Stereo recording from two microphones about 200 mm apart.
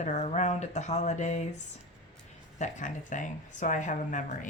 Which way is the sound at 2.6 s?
40° left (ahead or behind).